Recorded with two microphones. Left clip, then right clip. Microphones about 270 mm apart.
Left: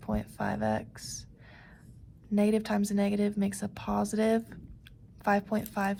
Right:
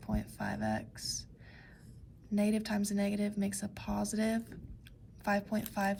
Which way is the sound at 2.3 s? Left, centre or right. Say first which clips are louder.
Left 6 dB; centre.